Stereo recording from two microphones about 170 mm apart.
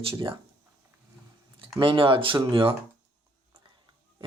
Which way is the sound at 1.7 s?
30° right (ahead or behind).